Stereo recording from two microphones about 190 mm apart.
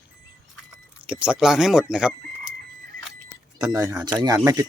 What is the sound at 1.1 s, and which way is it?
Speech, 5° right (ahead or behind).